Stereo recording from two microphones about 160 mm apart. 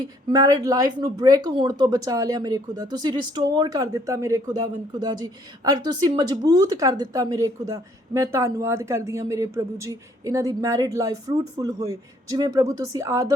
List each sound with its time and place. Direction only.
0.0 s a woman's voice: 25° right (ahead or behind)